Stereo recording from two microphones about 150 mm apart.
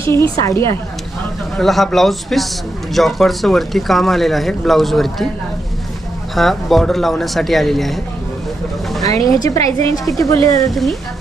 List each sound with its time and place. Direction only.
0.1 s a woman's voice: 20° left (ahead or behind)
1.5 s speech: centre (ahead or behind)
6.3 s speech: centre (ahead or behind)
9.0 s a woman's voice: 25° left (ahead or behind)
10.6 s speech: centre (ahead or behind)